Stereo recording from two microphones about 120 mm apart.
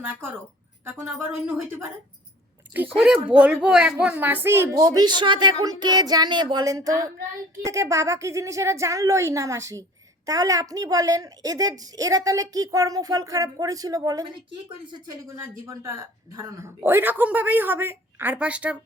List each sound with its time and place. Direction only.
0.0 s a woman's voice: 15° right (ahead or behind); by 14.3 s 30° right (ahead or behind)
15.4 s speech: 25° right (ahead or behind)